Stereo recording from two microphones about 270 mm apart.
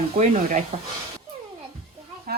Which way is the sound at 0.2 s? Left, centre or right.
Right.